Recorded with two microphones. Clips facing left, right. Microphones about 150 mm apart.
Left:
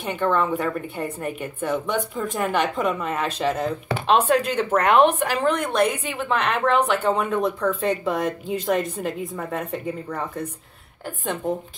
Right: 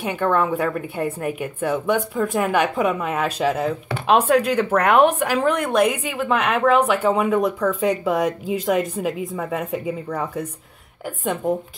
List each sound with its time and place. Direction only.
0.0 s a woman's voice: 5° right (ahead or behind)